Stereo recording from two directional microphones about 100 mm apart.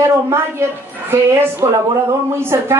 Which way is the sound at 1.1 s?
25° right (ahead or behind).